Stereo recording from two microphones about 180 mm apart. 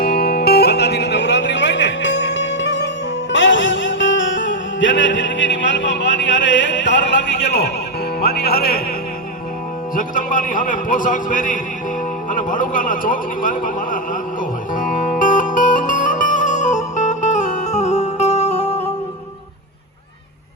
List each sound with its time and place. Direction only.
0.0 s music: 55° left (ahead or behind); by 2.9 s 75° left (ahead or behind)
3.3 s music: 90° left; by 8.8 s 60° left (ahead or behind)
9.9 s a man's voice: 50° left (ahead or behind)
15.2 s music: 45° left (ahead or behind)